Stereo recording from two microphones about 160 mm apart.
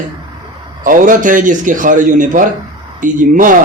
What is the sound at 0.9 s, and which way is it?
A man's voice, 55° right (ahead or behind).